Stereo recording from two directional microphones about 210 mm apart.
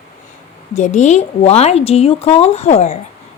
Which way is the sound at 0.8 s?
35° left (ahead or behind).